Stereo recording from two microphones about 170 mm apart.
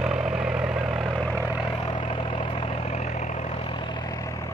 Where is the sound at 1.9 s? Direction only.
30° left (ahead or behind).